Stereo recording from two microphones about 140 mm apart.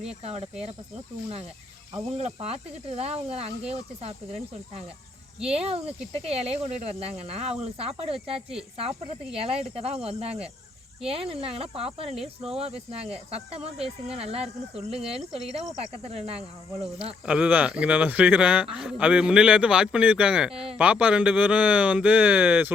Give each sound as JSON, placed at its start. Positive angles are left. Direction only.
{"t": 0.2, "sound": "speech", "side_deg": -45}
{"t": 1.9, "sound": "speech", "side_deg": -45}
{"t": 5.5, "sound": "speech", "side_deg": -45}
{"t": 12.1, "sound": "speech", "side_deg": -5}
{"t": 12.5, "sound": "speech", "side_deg": -45}
{"t": 16.0, "sound": "speech", "side_deg": -45}
{"t": 17.2, "sound": "a man's voice", "side_deg": -5}